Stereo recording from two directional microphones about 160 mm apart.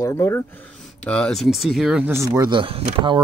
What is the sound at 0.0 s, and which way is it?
Speech, 15° left (ahead or behind).